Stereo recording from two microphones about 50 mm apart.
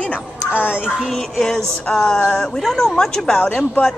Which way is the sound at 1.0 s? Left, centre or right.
Centre.